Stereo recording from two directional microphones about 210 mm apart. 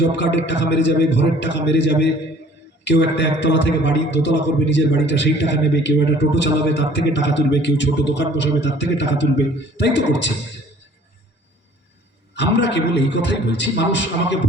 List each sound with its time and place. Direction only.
0.1 s a man's voice: 60° left (ahead or behind)
12.3 s a man's voice: 55° left (ahead or behind)